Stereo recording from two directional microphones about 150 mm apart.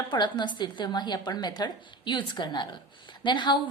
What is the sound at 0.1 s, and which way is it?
A woman's voice, 30° left (ahead or behind).